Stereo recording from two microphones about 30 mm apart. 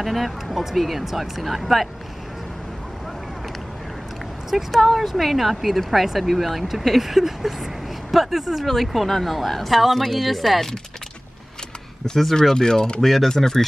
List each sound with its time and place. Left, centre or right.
0.0 s speech: centre
4.6 s speech: centre
12.5 s speech: left
13.0 s speech: centre